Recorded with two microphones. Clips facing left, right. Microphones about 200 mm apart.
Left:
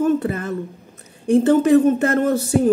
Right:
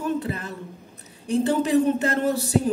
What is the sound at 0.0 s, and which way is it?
Speech, 50° left (ahead or behind).